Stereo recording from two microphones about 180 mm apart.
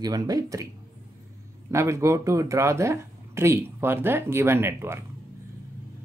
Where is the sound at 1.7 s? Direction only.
15° right (ahead or behind).